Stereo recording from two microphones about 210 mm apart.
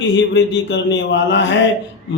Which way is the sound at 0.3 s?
55° left (ahead or behind).